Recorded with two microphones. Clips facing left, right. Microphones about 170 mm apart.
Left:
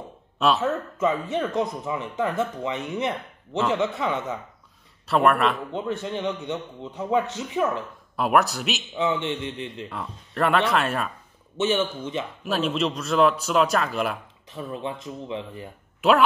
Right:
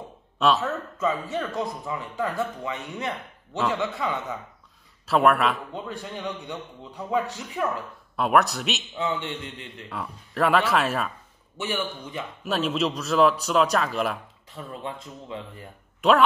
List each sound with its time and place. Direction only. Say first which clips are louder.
0.6 s a man's voice: left 4 dB; 20° left (ahead or behind)
5.0 s speech: even; centre (ahead or behind)
5.7 s a man's voice: left 6 dB; 20° left (ahead or behind)
8.2 s speech: even; centre (ahead or behind)
8.9 s a man's voice: left 5 dB; 20° left (ahead or behind)
9.8 s speech: even; centre (ahead or behind)
11.5 s a man's voice: left 6 dB; 25° left (ahead or behind)
12.4 s speech: even; centre (ahead or behind)
14.5 s a man's voice: left 4 dB; 20° left (ahead or behind)
16.0 s speech: even; centre (ahead or behind)